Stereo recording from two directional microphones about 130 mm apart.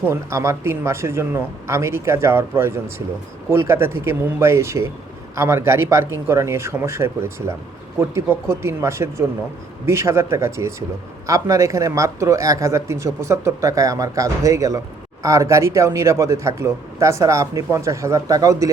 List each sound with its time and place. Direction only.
0.1 s speech: 20° right (ahead or behind)